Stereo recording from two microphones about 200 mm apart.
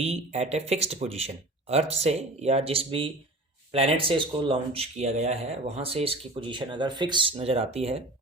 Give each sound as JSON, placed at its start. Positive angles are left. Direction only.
{"t": 0.0, "sound": "speech", "side_deg": -30}